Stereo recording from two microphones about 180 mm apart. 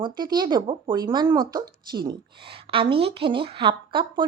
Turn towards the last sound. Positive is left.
turn(degrees=-25)  # may be behind; listen again after turning